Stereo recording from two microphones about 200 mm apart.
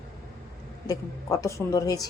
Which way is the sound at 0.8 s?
15° left (ahead or behind).